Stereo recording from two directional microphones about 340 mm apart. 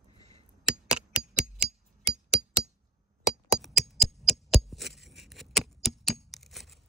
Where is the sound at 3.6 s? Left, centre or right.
Centre.